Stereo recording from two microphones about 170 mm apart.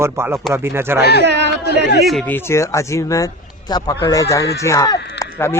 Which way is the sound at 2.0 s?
Centre (ahead or behind).